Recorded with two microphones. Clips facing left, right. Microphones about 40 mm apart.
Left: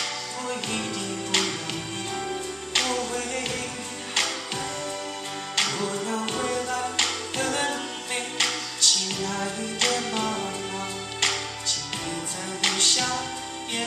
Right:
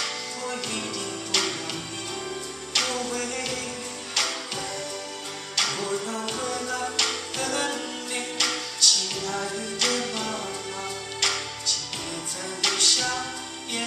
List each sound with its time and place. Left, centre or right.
1.3 s music: left
2.7 s music: left